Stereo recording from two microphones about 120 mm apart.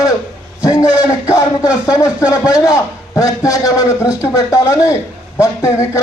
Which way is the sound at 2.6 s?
25° left (ahead or behind).